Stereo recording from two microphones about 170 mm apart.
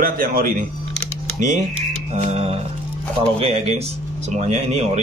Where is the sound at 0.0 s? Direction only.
55° right (ahead or behind).